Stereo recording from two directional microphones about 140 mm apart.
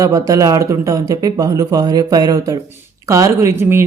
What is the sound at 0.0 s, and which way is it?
Speech, 25° right (ahead or behind).